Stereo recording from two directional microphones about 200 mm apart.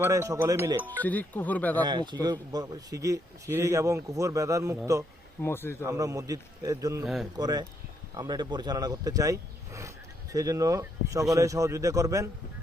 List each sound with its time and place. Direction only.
0.0 s a man's voice: 15° right (ahead or behind)
1.0 s speech: 10° left (ahead or behind)
1.8 s a man's voice: 20° right (ahead or behind)
5.4 s speech: 10° left (ahead or behind)
5.8 s a man's voice: 15° right (ahead or behind)
7.0 s speech: centre (ahead or behind)
7.3 s a man's voice: 20° right (ahead or behind)